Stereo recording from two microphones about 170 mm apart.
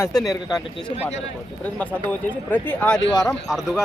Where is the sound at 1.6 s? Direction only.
10° left (ahead or behind).